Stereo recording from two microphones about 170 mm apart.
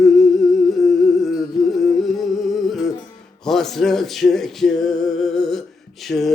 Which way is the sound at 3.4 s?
Centre (ahead or behind).